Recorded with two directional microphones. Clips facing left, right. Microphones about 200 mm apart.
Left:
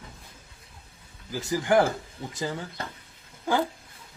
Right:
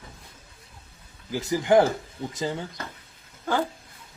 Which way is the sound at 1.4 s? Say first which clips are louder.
Right 3 dB; 20° right (ahead or behind).